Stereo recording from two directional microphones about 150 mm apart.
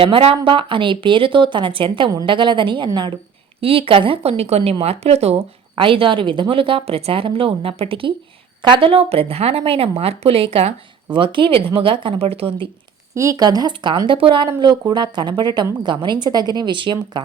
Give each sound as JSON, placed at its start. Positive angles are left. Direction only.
{"t": 0.0, "sound": "speech", "side_deg": -40}
{"t": 13.1, "sound": "a woman's voice", "side_deg": -25}